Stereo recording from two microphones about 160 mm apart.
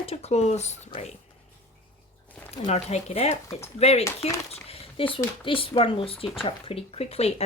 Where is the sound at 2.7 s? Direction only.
45° left (ahead or behind).